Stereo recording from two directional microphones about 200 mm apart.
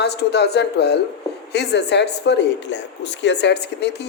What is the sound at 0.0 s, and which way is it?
Speech, 55° left (ahead or behind).